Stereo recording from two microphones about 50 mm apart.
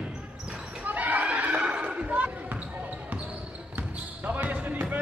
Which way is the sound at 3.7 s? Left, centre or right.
Right.